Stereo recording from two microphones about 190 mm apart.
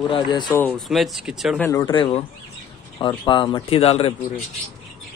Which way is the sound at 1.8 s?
25° left (ahead or behind).